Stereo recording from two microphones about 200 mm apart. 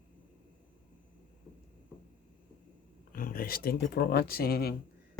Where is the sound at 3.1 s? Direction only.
45° left (ahead or behind).